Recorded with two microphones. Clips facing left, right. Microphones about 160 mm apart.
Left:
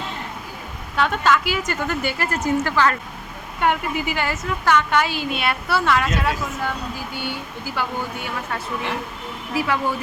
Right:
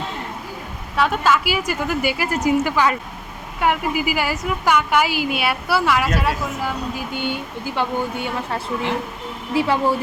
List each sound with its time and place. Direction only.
0.9 s a woman's voice: 5° right (ahead or behind)
7.1 s speech: 20° right (ahead or behind)